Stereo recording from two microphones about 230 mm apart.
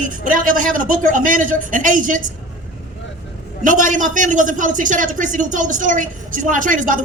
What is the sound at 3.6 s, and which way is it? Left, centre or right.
A woman's voice, right.